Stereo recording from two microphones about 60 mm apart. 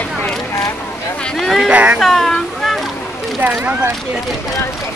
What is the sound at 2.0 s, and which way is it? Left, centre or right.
Speech, centre.